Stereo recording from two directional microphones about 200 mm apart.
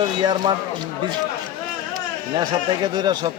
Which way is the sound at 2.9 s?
20° right (ahead or behind).